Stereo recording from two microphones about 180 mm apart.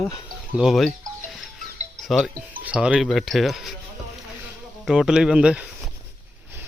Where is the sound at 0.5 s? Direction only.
Centre (ahead or behind).